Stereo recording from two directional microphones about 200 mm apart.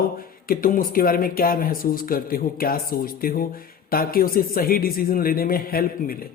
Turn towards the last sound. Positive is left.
turn(degrees=45)  # may be behind; listen again after turning